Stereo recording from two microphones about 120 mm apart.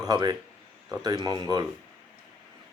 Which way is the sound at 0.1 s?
35° right (ahead or behind).